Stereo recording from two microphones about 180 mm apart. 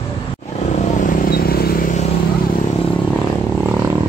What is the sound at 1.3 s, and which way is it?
Vehicle, 55° left (ahead or behind).